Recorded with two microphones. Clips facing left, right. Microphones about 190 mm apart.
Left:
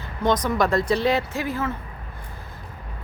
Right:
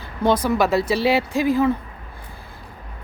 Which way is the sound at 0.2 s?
10° right (ahead or behind).